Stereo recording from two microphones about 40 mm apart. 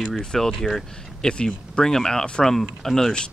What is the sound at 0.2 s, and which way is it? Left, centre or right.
Speech, centre.